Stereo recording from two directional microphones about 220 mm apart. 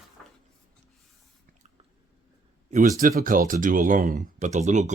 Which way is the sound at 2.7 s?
35° right (ahead or behind).